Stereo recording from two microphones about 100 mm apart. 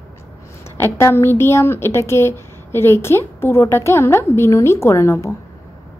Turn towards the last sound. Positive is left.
turn(degrees=25)  # may be behind; listen again after turning